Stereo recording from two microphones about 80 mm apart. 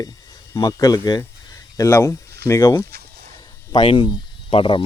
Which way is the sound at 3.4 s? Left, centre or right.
Left.